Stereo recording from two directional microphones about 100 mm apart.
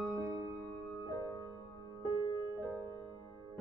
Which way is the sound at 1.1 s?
35° left (ahead or behind).